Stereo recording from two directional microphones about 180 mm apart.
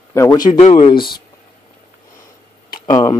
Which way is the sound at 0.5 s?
35° left (ahead or behind).